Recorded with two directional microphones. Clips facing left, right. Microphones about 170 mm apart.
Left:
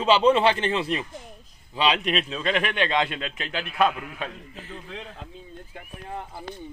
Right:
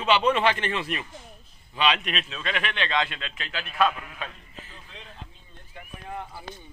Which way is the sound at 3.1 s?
40° left (ahead or behind).